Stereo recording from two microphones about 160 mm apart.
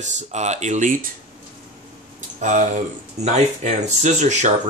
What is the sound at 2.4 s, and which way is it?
Speech, 50° right (ahead or behind).